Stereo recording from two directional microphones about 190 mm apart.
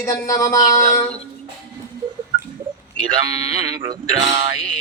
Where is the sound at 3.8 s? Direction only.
30° right (ahead or behind).